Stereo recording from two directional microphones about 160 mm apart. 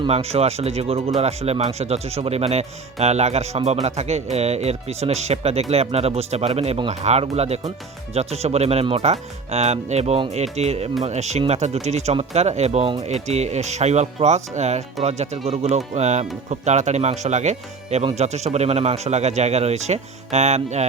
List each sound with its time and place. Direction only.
0.1 s speech: 40° right (ahead or behind)